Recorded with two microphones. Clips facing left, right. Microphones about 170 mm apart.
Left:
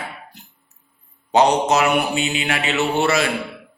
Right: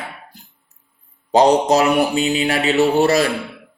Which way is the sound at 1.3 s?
35° right (ahead or behind).